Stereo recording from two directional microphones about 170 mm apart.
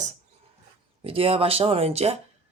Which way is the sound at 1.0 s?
35° right (ahead or behind).